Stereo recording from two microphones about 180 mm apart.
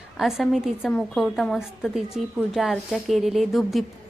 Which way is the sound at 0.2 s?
Centre (ahead or behind).